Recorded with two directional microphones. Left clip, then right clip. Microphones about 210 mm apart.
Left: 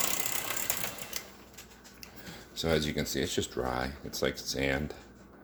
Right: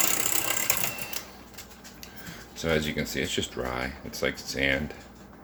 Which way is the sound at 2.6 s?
30° left (ahead or behind).